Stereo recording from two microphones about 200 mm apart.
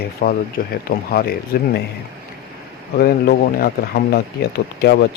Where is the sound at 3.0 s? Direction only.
50° left (ahead or behind).